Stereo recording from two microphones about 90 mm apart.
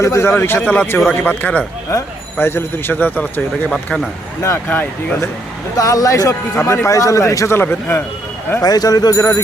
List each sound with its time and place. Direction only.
0.0 s a man's voice: 30° left (ahead or behind)
1.9 s a man's voice: 30° left (ahead or behind)
3.7 s speech: 10° left (ahead or behind)
4.7 s a man's voice: 20° left (ahead or behind)
5.7 s a man's voice: 40° left (ahead or behind)
6.6 s a man's voice: 25° left (ahead or behind)
6.8 s a man's voice: 35° left (ahead or behind)
8.6 s a man's voice: 45° left (ahead or behind)